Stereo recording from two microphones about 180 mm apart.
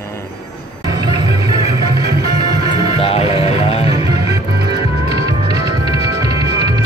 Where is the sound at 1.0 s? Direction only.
20° right (ahead or behind).